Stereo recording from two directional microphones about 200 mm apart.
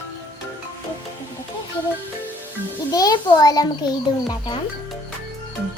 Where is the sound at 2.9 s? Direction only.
20° left (ahead or behind).